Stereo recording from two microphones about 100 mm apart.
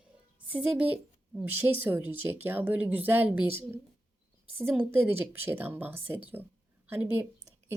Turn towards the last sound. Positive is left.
turn(degrees=-25)  # may be behind; listen again after turning